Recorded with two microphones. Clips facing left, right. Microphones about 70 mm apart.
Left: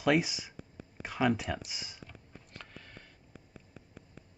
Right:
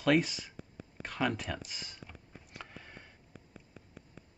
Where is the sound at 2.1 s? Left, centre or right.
Centre.